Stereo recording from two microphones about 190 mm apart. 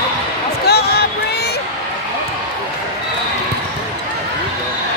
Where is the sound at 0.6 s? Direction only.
55° left (ahead or behind).